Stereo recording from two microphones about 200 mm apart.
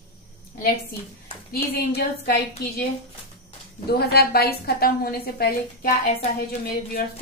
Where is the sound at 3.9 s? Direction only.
50° left (ahead or behind).